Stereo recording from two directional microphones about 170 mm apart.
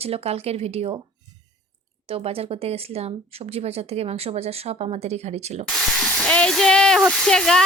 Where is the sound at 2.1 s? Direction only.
35° right (ahead or behind).